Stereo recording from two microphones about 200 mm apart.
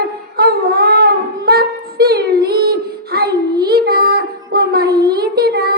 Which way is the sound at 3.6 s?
50° right (ahead or behind).